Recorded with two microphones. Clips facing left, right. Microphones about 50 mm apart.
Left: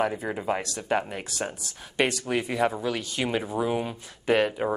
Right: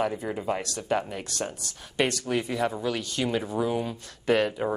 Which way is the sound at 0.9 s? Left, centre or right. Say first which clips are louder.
Left 1 dB; centre.